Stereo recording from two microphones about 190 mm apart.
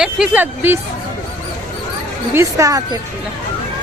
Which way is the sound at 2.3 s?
15° right (ahead or behind).